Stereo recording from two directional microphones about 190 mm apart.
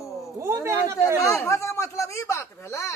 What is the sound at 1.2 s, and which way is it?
Speech, 15° left (ahead or behind).